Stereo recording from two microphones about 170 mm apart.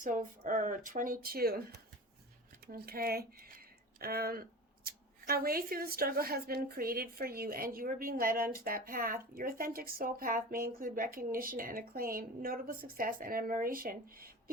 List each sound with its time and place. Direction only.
0.0 s speech: 50° right (ahead or behind)
2.6 s speech: 60° right (ahead or behind)